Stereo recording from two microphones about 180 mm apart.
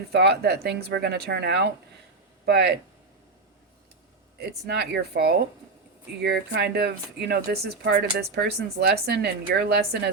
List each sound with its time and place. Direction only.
0.1 s speech: 65° right (ahead or behind)
4.4 s speech: 65° right (ahead or behind)